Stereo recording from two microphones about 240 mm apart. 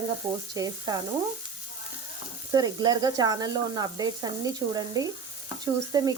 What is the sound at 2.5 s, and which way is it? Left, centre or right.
Frying, centre.